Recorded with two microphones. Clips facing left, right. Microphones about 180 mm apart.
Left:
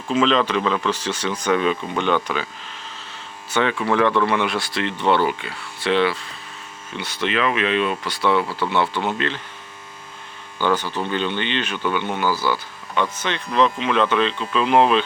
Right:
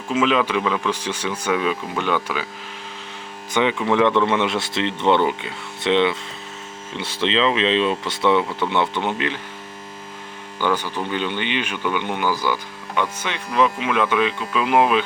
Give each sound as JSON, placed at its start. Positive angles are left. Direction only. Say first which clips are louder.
{"t": 0.1, "sound": "speech", "louder": "left 1 dB", "side_deg": -10}
{"t": 3.5, "sound": "speech", "louder": "right 1 dB", "side_deg": -15}
{"t": 10.6, "sound": "speech", "louder": "left 1 dB", "side_deg": -10}